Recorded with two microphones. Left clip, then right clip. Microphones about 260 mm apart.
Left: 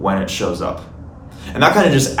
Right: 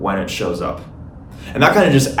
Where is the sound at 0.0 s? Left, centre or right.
Centre.